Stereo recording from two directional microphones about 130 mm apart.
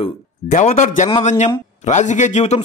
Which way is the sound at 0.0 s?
60° left (ahead or behind).